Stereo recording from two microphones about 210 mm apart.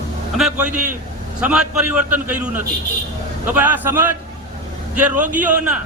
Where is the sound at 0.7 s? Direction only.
40° right (ahead or behind).